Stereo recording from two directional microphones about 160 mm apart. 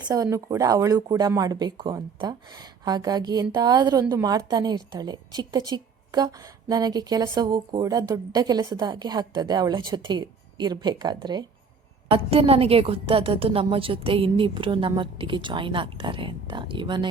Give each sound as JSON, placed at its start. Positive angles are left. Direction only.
{"t": 0.1, "sound": "a woman's voice", "side_deg": -20}
{"t": 12.0, "sound": "a woman's voice", "side_deg": -35}